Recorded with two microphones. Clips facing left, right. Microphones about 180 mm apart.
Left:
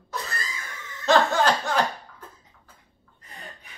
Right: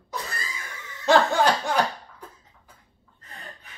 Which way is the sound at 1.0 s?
15° right (ahead or behind).